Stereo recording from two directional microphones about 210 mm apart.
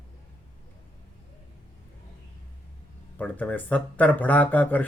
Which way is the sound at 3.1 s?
5° left (ahead or behind).